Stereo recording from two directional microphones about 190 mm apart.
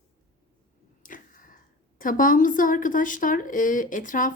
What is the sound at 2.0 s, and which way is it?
Speech, 45° left (ahead or behind).